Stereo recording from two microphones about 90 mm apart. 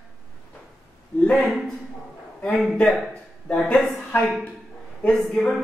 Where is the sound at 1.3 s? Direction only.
Centre (ahead or behind).